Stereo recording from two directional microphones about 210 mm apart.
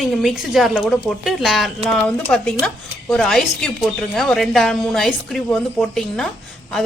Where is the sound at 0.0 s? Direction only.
Centre (ahead or behind).